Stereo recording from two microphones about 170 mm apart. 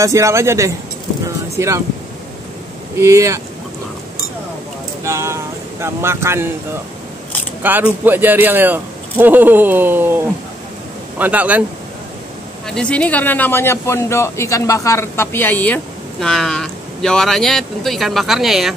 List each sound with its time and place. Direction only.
0.0 s a man's voice: 20° right (ahead or behind)
1.2 s vehicle: 15° right (ahead or behind)
3.0 s a man's voice: 15° right (ahead or behind)
5.0 s speech: 15° right (ahead or behind)
7.6 s a man's voice: 10° right (ahead or behind)
12.6 s a man's voice: 5° left (ahead or behind)